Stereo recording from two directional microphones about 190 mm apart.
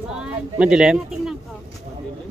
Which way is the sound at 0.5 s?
5° right (ahead or behind).